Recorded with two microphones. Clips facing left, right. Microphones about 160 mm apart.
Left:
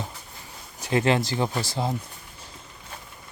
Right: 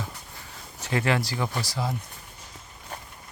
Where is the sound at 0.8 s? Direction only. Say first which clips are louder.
Left 3 dB; 20° left (ahead or behind).